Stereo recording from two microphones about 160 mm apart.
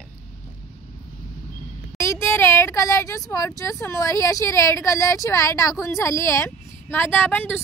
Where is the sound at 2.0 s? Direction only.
15° left (ahead or behind).